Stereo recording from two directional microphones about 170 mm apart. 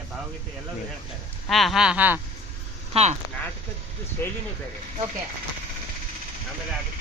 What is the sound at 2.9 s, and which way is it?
Speech, 35° right (ahead or behind).